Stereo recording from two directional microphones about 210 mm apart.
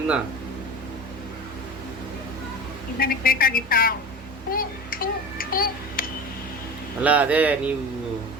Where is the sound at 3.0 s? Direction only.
45° left (ahead or behind).